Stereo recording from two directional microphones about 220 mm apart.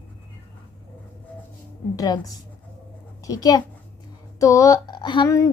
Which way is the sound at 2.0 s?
15° left (ahead or behind).